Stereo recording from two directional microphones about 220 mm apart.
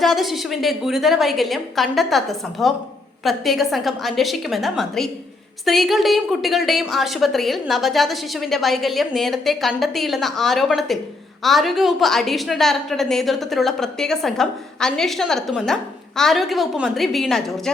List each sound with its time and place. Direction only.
0.0 s a woman's voice: centre (ahead or behind)